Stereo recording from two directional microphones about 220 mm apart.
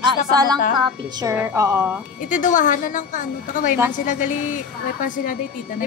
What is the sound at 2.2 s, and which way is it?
A woman's voice, 35° left (ahead or behind).